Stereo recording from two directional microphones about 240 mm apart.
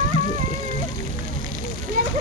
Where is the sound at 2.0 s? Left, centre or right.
Right.